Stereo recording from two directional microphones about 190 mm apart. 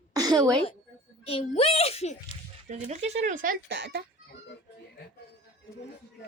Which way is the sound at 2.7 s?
35° right (ahead or behind).